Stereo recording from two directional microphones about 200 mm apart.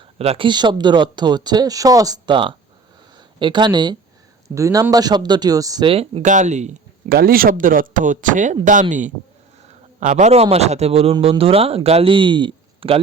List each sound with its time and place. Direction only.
0.2 s a man's voice: 30° right (ahead or behind)
7.2 s a man's voice: 45° right (ahead or behind); by 13.0 s 25° right (ahead or behind)